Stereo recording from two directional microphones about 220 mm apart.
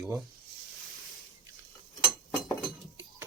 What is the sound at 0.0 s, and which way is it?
Speech, 5° right (ahead or behind).